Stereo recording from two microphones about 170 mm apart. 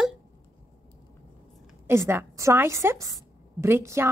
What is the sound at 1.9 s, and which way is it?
A woman's voice, 15° right (ahead or behind).